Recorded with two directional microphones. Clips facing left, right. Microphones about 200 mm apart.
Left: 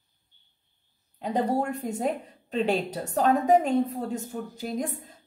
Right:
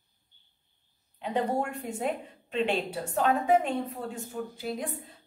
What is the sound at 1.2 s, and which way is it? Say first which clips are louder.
A woman's voice: left 3 dB; 40° left (ahead or behind).